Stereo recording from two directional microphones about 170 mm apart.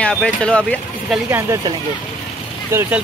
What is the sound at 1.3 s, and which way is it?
Speech, 15° right (ahead or behind).